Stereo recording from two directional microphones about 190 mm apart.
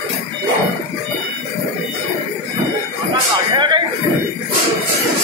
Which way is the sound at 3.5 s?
25° right (ahead or behind).